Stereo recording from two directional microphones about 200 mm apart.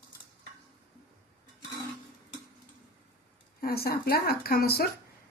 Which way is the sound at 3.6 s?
50° left (ahead or behind).